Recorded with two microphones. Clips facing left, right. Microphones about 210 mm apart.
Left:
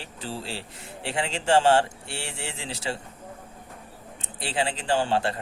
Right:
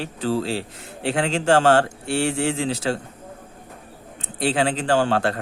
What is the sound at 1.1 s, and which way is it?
A man's voice, 90° right.